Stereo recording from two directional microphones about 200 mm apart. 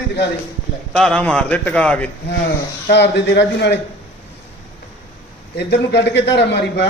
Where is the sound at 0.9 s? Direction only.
5° left (ahead or behind).